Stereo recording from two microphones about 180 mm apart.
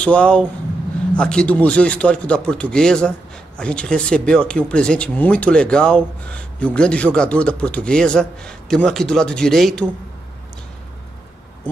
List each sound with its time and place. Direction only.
0.0 s speech: 5° left (ahead or behind)